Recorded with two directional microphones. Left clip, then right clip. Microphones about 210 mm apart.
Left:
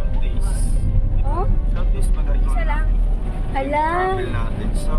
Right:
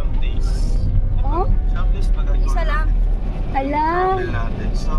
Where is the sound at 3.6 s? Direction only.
20° right (ahead or behind).